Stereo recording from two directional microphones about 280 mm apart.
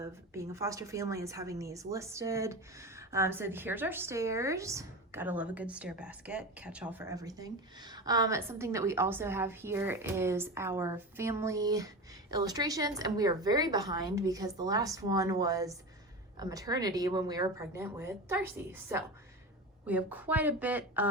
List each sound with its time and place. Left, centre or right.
0.0 s a woman's voice: centre